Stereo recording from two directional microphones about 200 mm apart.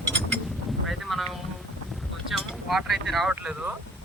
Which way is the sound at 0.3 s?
Centre (ahead or behind).